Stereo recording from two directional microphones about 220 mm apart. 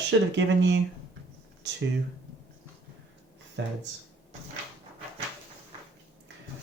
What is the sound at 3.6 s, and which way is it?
Speech, 55° right (ahead or behind).